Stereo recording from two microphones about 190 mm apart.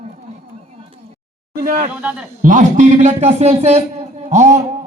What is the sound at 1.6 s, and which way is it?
A man's voice, 45° right (ahead or behind).